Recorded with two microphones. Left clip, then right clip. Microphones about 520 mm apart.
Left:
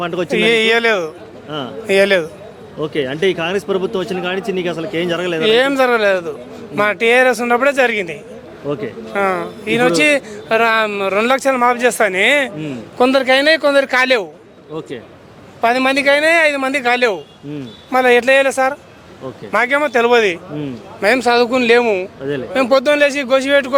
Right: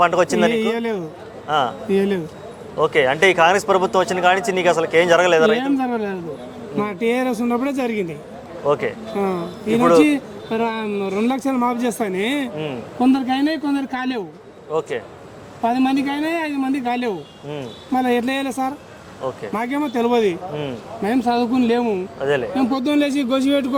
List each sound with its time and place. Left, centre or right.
0.0 s speech: right
0.5 s a man's voice: left
1.5 s speech: right
1.9 s a man's voice: left
2.8 s speech: right
5.5 s a man's voice: left
14.8 s speech: right
15.6 s a man's voice: left
22.2 s speech: right
22.6 s speech: left